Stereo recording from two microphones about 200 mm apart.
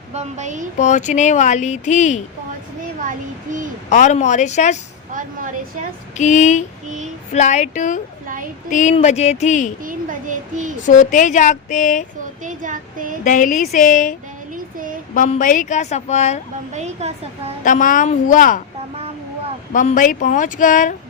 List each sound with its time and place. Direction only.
0.1 s a child's voice: 35° right (ahead or behind)
0.8 s speech: 35° left (ahead or behind)
3.8 s speech: 35° left (ahead or behind)
6.1 s speech: 35° left (ahead or behind)
9.8 s a child's voice: 40° right (ahead or behind)
10.8 s speech: 40° left (ahead or behind)
12.5 s a child's voice: 40° right (ahead or behind)
13.2 s speech: 40° left (ahead or behind)
16.7 s a child's voice: 35° right (ahead or behind)
17.6 s speech: 40° left (ahead or behind)
19.7 s speech: 40° left (ahead or behind)